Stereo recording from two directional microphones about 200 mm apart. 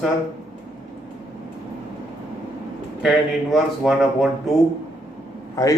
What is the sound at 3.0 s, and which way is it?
Speech, centre (ahead or behind).